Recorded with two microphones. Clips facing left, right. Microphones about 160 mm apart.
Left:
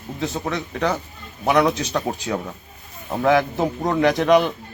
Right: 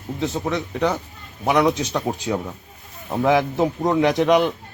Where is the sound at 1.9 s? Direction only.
10° right (ahead or behind).